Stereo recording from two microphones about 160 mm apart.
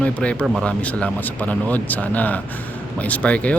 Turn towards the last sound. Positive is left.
turn(degrees=10)  # may be behind; listen again after turning